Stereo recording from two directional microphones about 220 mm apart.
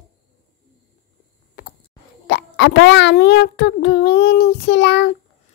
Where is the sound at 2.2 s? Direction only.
50° left (ahead or behind).